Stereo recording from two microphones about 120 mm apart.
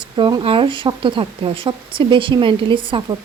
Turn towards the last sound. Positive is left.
turn(degrees=-45)  # may be behind; listen again after turning